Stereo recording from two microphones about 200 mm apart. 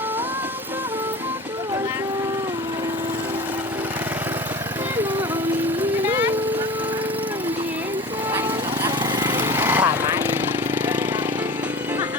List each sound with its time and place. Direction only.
5.8 s music: 10° right (ahead or behind)
9.2 s lawn mower: 10° right (ahead or behind)